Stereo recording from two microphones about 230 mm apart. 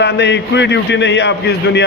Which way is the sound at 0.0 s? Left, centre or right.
Left.